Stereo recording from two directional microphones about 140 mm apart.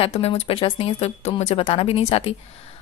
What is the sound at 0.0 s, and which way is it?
A woman's voice, 45° left (ahead or behind).